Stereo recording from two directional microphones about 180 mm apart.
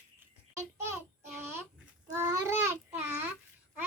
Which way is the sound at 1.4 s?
10° right (ahead or behind).